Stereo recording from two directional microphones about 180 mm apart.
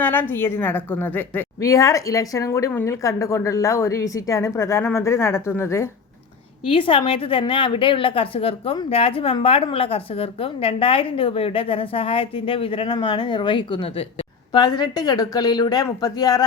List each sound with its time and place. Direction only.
0.0 s a woman's voice: 10° left (ahead or behind)
6.7 s a woman's voice: 30° left (ahead or behind)